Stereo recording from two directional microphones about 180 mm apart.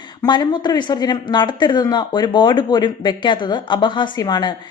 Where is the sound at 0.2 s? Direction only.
25° left (ahead or behind).